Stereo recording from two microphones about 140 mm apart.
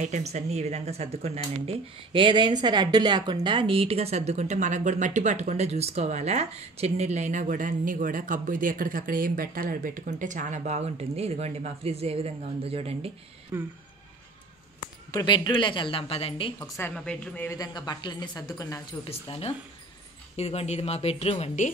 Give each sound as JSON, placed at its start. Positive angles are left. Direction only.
{"t": 0.0, "sound": "speech", "side_deg": -55}
{"t": 13.5, "sound": "speech", "side_deg": -15}
{"t": 15.0, "sound": "speech", "side_deg": 30}
{"t": 16.9, "sound": "a woman's voice", "side_deg": 5}
{"t": 17.5, "sound": "a woman's voice", "side_deg": 30}
{"t": 19.0, "sound": "a woman's voice", "side_deg": 40}